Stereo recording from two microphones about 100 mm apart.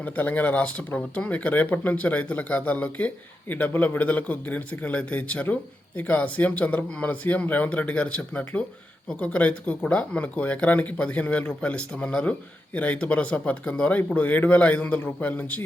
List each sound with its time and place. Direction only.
0.0 s speech: 15° left (ahead or behind)